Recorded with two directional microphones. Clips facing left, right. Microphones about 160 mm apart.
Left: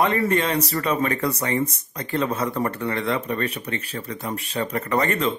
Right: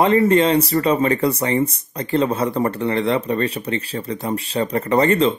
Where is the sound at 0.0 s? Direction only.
25° right (ahead or behind).